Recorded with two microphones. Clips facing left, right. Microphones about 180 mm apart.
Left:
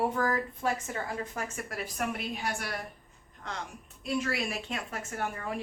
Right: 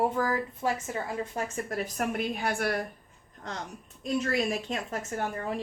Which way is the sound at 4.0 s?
40° right (ahead or behind).